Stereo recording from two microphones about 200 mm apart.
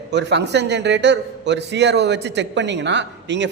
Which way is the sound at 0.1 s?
60° right (ahead or behind).